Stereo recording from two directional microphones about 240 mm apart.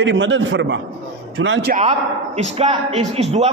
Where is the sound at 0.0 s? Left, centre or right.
Right.